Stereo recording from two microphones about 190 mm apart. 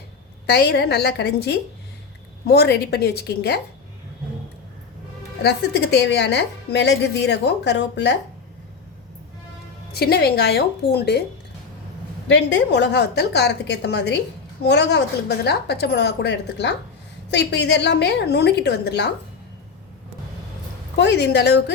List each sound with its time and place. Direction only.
0.5 s a woman's voice: 55° left (ahead or behind)
5.4 s a woman's voice: 60° left (ahead or behind)
9.9 s a woman's voice: 55° left (ahead or behind)
12.3 s a woman's voice: 65° left (ahead or behind)
21.0 s a woman's voice: 60° left (ahead or behind)